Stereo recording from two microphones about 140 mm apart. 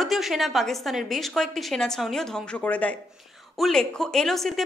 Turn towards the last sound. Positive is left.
turn(degrees=0)  # may be behind; listen again after turning